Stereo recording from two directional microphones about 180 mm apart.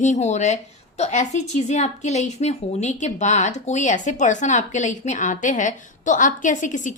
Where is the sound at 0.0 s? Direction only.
40° left (ahead or behind).